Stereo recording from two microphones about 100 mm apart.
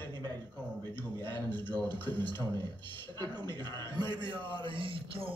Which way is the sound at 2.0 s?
50° right (ahead or behind).